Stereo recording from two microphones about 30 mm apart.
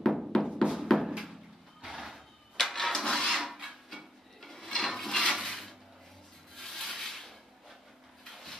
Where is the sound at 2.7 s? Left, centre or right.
Centre.